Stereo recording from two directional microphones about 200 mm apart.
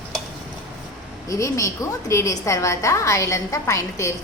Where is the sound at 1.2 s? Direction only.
15° left (ahead or behind).